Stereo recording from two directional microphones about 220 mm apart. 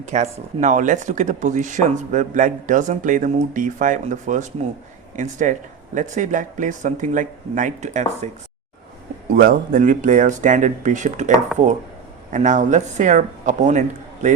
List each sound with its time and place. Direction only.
0.0 s speech: 30° right (ahead or behind)
9.3 s speech: 40° right (ahead or behind)
12.3 s speech: 35° right (ahead or behind)